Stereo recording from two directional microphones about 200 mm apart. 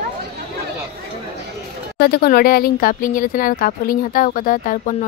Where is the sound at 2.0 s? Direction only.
50° left (ahead or behind).